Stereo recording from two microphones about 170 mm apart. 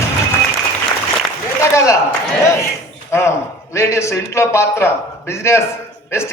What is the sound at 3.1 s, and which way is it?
A man's voice, 15° left (ahead or behind).